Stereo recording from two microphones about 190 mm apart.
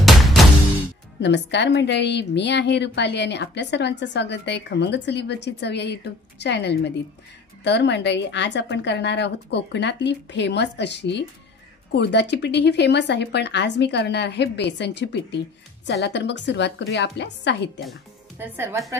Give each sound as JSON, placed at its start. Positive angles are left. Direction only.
{"t": 0.0, "sound": "a sound", "side_deg": 0}
{"t": 1.2, "sound": "a woman's voice", "side_deg": 65}
{"t": 18.4, "sound": "a woman's voice", "side_deg": -15}